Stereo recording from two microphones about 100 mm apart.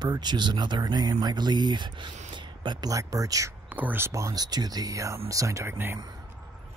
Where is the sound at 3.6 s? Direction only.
15° right (ahead or behind).